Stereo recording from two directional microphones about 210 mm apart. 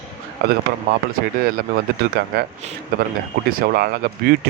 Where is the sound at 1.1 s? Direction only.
45° right (ahead or behind).